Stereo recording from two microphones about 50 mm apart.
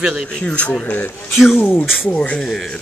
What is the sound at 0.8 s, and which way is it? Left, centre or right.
Speech, left.